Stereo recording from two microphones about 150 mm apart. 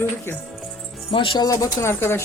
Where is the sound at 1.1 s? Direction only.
35° left (ahead or behind).